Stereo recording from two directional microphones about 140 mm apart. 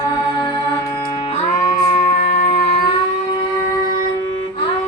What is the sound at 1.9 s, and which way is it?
Music, 60° left (ahead or behind).